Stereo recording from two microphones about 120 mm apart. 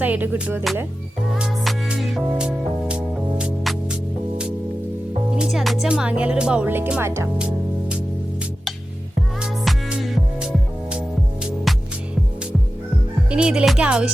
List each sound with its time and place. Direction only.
0.0 s speech: 15° right (ahead or behind)
1.4 s music: 5° right (ahead or behind)
5.4 s speech: centre (ahead or behind); by 7.3 s 20° right (ahead or behind)
9.4 s music: 5° right (ahead or behind)
13.3 s speech: 10° right (ahead or behind)